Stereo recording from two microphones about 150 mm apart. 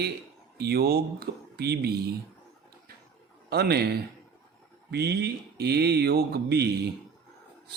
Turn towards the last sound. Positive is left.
turn(degrees=-90)